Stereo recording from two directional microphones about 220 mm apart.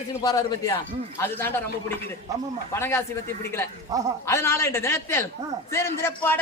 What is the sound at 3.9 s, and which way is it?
Speech, 15° right (ahead or behind).